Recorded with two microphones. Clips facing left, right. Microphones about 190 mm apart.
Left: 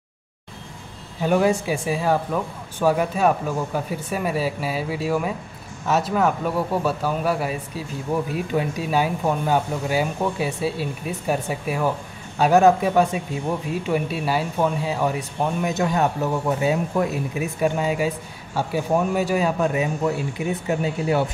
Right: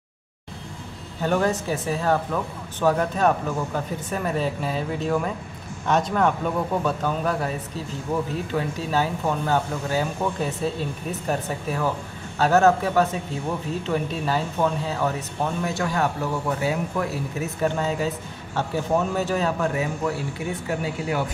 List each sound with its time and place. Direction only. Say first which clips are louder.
1.2 s speech: left 3 dB; 10° left (ahead or behind)